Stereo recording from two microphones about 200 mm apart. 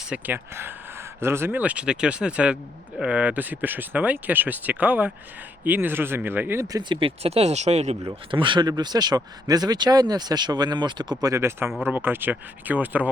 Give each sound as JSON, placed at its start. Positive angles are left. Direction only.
{"t": 0.1, "sound": "speech", "side_deg": -10}
{"t": 11.7, "sound": "speech", "side_deg": 0}
{"t": 11.9, "sound": "speech", "side_deg": -10}